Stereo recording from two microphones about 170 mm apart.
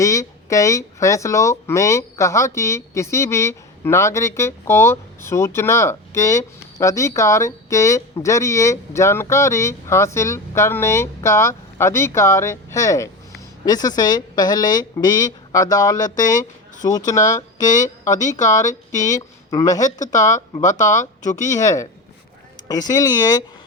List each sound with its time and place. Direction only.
0.0 s a woman's voice: 20° left (ahead or behind)
17.8 s speech: 45° left (ahead or behind)
18.9 s a woman's voice: 20° left (ahead or behind)
20.1 s speech: 45° left (ahead or behind)
21.5 s a woman's voice: 20° left (ahead or behind)